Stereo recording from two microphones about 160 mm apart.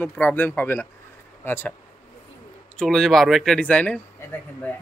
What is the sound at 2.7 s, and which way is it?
Speech, 5° left (ahead or behind).